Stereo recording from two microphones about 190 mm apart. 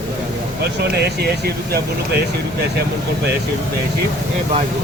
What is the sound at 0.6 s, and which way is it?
Speech, 60° right (ahead or behind).